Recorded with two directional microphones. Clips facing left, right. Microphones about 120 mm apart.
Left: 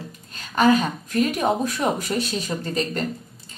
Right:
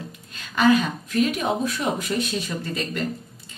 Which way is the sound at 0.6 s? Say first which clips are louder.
Left 1 dB; 40° left (ahead or behind).